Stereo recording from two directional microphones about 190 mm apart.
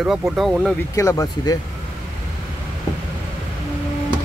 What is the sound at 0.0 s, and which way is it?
Speech, centre (ahead or behind).